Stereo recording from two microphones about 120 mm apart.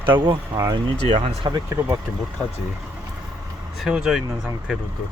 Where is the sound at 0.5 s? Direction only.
25° right (ahead or behind).